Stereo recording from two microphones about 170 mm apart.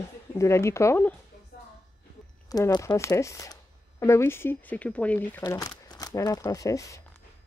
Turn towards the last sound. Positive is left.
turn(degrees=20)  # may be behind; listen again after turning